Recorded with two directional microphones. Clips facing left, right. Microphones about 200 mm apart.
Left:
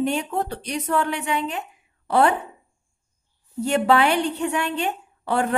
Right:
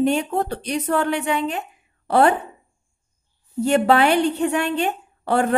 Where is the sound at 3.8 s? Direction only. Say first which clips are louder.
Even; 50° right (ahead or behind).